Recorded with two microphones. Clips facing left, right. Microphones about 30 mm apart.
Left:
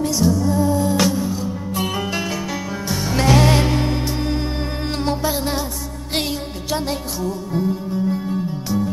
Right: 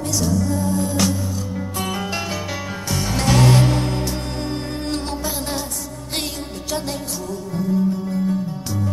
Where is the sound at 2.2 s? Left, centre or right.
Centre.